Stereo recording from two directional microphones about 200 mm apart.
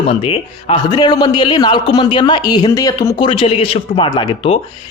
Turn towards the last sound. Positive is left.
turn(degrees=25)  # may be behind; listen again after turning